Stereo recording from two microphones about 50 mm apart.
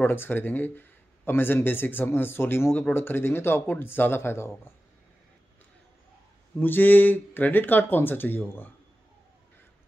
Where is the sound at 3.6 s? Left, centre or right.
Left.